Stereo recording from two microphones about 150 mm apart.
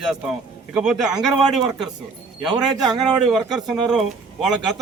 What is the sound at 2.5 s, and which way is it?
Speech, 30° right (ahead or behind).